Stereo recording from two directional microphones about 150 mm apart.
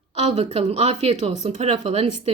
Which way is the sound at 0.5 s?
45° right (ahead or behind).